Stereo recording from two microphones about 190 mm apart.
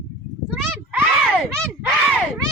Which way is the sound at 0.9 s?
5° right (ahead or behind).